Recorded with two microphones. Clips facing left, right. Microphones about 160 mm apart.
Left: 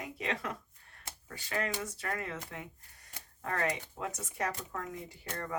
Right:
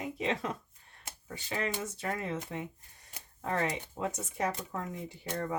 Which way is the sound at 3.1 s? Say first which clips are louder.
Right 4 dB; 25° right (ahead or behind).